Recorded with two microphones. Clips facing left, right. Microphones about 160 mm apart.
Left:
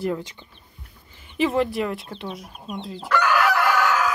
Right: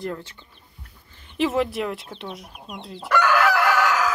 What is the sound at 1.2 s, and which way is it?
Speech, centre (ahead or behind).